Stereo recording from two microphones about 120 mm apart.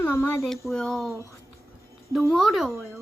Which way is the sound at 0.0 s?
20° left (ahead or behind).